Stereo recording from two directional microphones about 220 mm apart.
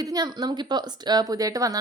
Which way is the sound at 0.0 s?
15° right (ahead or behind).